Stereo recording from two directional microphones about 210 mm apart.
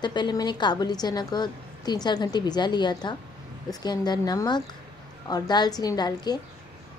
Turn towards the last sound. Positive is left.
turn(degrees=20)  # may be behind; listen again after turning